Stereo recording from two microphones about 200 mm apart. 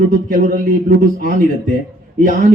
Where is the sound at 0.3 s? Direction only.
45° right (ahead or behind).